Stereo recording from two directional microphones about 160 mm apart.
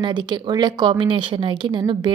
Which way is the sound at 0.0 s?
30° right (ahead or behind).